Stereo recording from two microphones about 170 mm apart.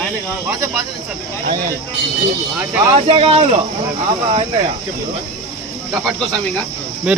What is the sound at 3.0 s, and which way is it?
Speech, 35° right (ahead or behind).